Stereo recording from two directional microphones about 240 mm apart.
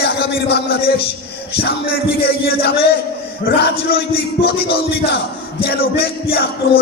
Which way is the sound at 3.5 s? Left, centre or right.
Left.